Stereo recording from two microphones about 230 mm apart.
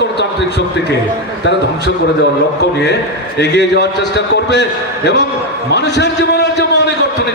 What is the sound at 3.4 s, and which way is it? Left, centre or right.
A man's voice, left.